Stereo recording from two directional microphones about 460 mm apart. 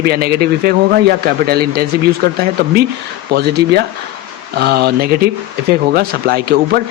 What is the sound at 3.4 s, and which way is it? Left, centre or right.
Speech, right.